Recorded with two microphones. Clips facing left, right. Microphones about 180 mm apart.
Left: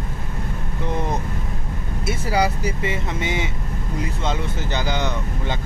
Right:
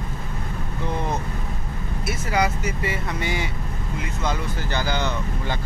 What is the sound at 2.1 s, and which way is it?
Speech, 30° left (ahead or behind).